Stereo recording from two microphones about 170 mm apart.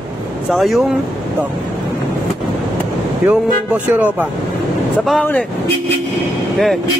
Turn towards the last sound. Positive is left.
turn(degrees=0)  # may be behind; listen again after turning